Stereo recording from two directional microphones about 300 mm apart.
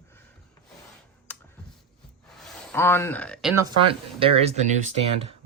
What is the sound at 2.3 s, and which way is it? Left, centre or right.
Speech, centre.